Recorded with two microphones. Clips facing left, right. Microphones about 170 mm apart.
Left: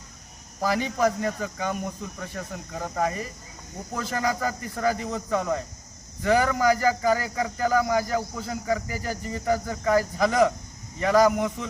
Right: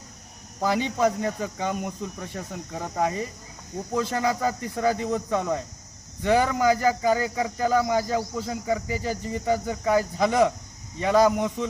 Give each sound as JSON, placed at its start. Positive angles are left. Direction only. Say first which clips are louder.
{"t": 0.6, "sound": "speech", "louder": "right 1 dB", "side_deg": -20}